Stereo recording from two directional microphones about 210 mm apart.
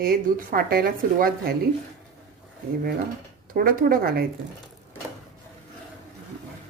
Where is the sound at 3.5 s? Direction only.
45° right (ahead or behind).